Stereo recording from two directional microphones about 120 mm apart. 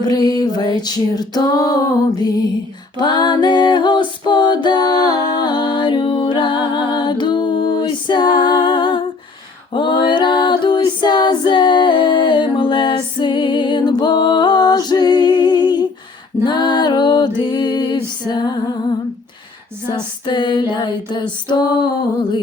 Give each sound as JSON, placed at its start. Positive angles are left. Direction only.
{"t": 0.0, "sound": "female singing", "side_deg": 30}
{"t": 3.0, "sound": "a capella", "side_deg": 35}
{"t": 9.7, "sound": "music", "side_deg": 40}
{"t": 18.3, "sound": "female singing", "side_deg": 35}
{"t": 19.9, "sound": "female singing", "side_deg": 40}